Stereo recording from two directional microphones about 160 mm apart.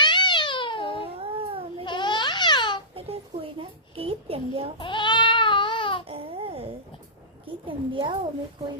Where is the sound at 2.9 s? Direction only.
40° right (ahead or behind).